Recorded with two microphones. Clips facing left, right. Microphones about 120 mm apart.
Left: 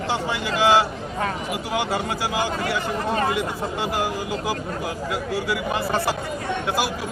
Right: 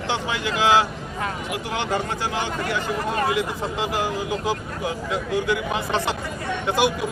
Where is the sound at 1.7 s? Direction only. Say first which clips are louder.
Left 1 dB; 5° left (ahead or behind).